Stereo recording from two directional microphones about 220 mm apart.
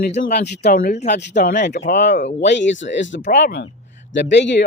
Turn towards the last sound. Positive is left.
turn(degrees=55)  # may be behind; listen again after turning